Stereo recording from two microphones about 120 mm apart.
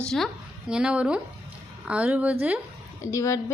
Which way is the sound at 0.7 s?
10° right (ahead or behind).